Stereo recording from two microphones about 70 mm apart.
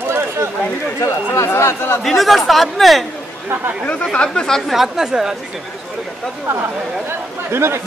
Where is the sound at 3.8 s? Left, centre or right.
Centre.